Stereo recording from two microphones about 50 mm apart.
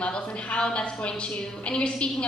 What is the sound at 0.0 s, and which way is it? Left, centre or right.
A woman's voice, left.